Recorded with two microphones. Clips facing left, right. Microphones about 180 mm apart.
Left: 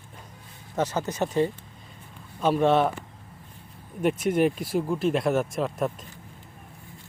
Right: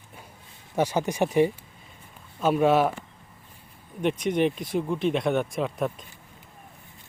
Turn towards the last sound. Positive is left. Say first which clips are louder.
# even
turn(degrees=0)  # may be behind; listen again after turning